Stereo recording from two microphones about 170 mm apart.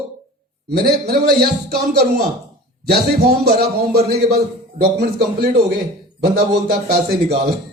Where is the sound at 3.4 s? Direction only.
70° right (ahead or behind).